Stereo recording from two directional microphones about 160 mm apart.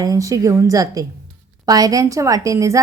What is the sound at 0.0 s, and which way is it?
A woman's voice, 20° right (ahead or behind).